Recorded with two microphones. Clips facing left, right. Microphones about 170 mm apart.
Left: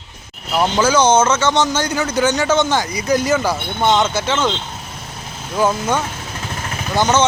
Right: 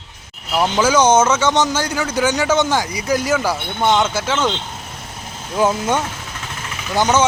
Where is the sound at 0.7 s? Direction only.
15° right (ahead or behind).